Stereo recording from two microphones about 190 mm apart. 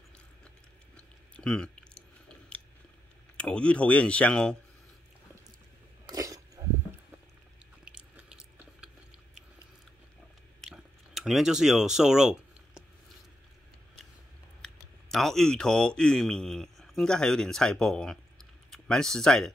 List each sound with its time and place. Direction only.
0.9 s chewing: 5° left (ahead or behind)
3.3 s speech: 5° left (ahead or behind)
6.0 s a sound: 20° right (ahead or behind)
7.8 s a sound: 5° right (ahead or behind)
10.6 s chewing: centre (ahead or behind)
14.6 s speech: centre (ahead or behind)